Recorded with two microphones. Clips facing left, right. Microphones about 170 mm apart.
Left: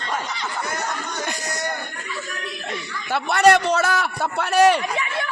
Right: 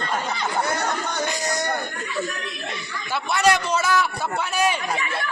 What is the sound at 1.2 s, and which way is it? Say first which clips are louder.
Speech: right 3 dB; 60° left (ahead or behind).